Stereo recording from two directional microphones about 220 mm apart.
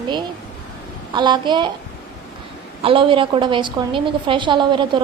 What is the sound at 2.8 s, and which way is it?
A woman's voice, 25° right (ahead or behind).